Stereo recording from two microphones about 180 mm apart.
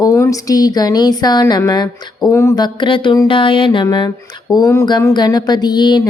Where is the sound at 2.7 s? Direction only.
25° left (ahead or behind).